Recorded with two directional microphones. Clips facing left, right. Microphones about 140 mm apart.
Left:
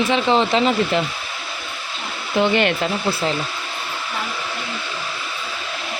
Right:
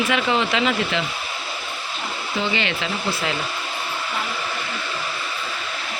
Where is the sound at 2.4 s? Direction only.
55° left (ahead or behind).